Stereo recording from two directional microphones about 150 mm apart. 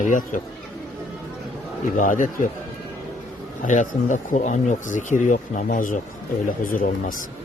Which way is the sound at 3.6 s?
55° left (ahead or behind).